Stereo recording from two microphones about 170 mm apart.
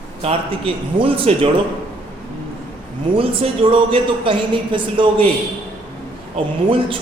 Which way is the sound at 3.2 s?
30° right (ahead or behind).